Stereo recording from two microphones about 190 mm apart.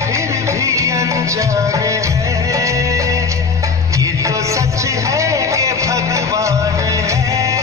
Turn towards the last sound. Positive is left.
turn(degrees=-15)  # may be behind; listen again after turning